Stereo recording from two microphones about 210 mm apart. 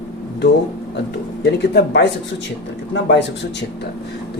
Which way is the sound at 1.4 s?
50° left (ahead or behind).